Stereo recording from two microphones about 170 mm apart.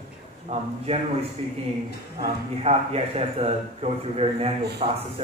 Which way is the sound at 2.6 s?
35° right (ahead or behind).